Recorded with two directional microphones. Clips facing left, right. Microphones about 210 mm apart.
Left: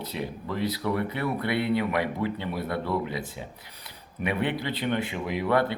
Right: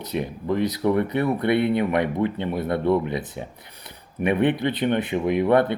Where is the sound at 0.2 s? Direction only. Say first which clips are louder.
Right 7 dB; 20° right (ahead or behind).